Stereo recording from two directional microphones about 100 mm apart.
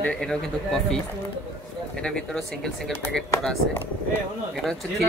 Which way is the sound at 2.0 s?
5° left (ahead or behind).